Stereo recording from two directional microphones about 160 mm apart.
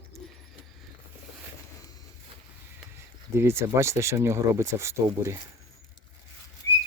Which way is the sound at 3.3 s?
15° right (ahead or behind).